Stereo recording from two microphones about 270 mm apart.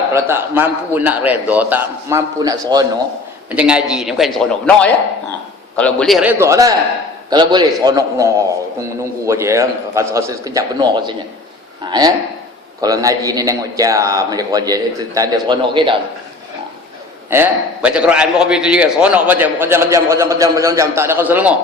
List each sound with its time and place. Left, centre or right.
0.1 s a man's voice: centre
17.2 s a man's voice: centre